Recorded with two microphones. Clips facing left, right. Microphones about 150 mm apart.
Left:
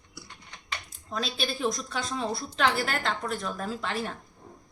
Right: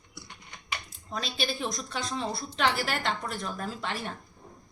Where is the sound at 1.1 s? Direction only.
Centre (ahead or behind).